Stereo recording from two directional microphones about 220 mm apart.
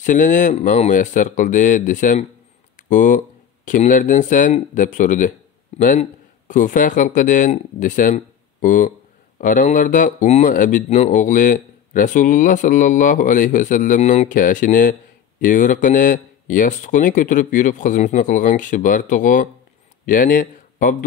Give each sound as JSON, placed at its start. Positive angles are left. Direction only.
{"t": 0.0, "sound": "speech", "side_deg": 35}